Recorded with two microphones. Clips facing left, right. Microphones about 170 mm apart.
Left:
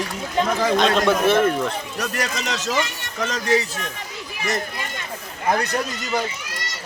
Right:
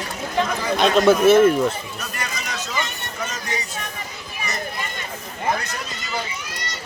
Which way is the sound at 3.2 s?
85° left.